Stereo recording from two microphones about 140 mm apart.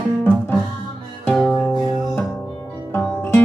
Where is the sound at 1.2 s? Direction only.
5° left (ahead or behind).